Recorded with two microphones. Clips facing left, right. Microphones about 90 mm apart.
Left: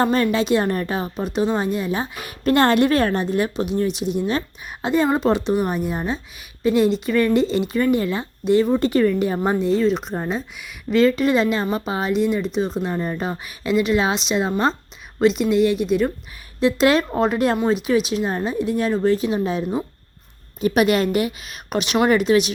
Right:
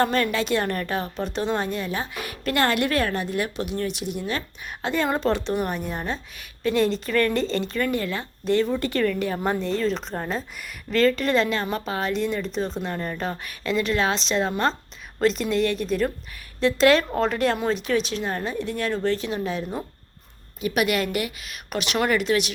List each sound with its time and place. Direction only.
0.0 s a woman's voice: 20° left (ahead or behind)
20.6 s a woman's voice: 35° left (ahead or behind)